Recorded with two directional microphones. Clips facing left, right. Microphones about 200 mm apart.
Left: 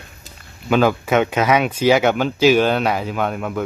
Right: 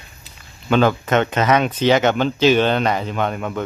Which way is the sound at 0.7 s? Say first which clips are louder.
Even; 5° left (ahead or behind).